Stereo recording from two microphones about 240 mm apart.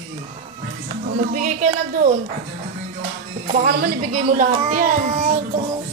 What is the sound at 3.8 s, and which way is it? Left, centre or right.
Speech, right.